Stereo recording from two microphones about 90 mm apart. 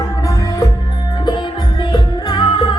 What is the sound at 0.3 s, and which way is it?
Music, 35° left (ahead or behind).